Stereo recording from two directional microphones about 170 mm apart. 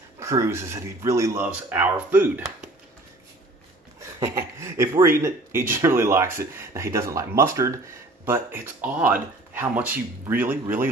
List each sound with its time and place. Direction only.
0.2 s speech: 15° right (ahead or behind)
4.2 s speech: 15° right (ahead or behind)